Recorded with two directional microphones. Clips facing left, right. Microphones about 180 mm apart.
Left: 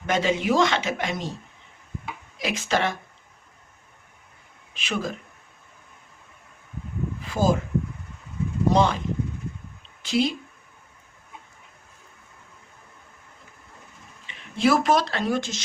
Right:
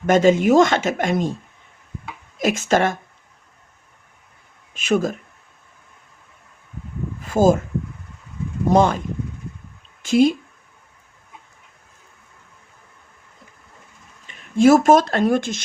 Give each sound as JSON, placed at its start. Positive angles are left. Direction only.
{"t": 0.0, "sound": "speech", "side_deg": -45}
{"t": 2.4, "sound": "speech", "side_deg": -45}
{"t": 4.7, "sound": "speech", "side_deg": -45}
{"t": 7.2, "sound": "speech", "side_deg": -45}
{"t": 8.7, "sound": "speech", "side_deg": -45}
{"t": 10.0, "sound": "speech", "side_deg": -45}
{"t": 14.3, "sound": "speech", "side_deg": -45}